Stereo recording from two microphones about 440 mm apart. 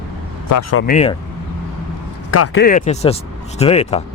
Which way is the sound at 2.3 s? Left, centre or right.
Left.